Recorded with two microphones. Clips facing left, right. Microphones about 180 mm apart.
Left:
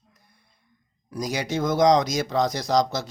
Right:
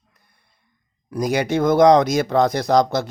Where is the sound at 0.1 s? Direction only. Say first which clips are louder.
Left 3 dB; 60° right (ahead or behind).